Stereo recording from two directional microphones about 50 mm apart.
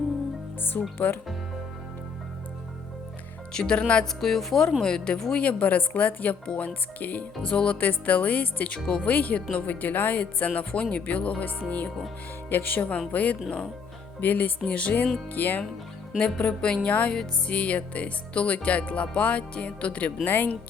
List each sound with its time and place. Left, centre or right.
0.6 s a woman's voice: left
3.5 s speech: centre
4.0 s a woman's voice: centre; by 6.3 s left
6.4 s speech: centre
7.0 s a woman's voice: left
7.4 s speech: left
7.8 s a woman's voice: left
12.5 s a woman's voice: left
16.1 s speech: left
20.2 s a woman's voice: left